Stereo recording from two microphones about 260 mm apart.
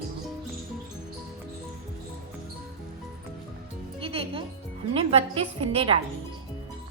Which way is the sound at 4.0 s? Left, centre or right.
Right.